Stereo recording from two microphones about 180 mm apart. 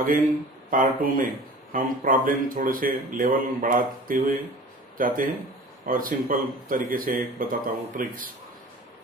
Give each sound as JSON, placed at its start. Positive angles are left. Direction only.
{"t": 0.7, "sound": "a man's voice", "side_deg": -50}